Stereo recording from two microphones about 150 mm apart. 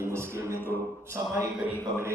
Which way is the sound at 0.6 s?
15° left (ahead or behind).